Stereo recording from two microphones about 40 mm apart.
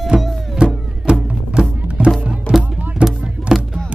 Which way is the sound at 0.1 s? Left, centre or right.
Centre.